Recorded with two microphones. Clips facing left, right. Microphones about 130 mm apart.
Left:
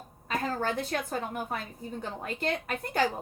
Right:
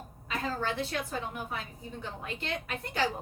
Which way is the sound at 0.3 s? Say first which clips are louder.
Left 3 dB; 45° left (ahead or behind).